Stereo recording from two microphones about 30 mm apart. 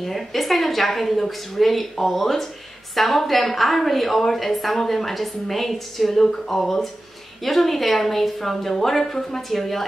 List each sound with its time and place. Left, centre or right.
0.0 s a woman's voice: centre